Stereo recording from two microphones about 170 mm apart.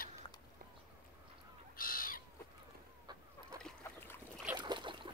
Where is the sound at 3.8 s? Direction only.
15° left (ahead or behind).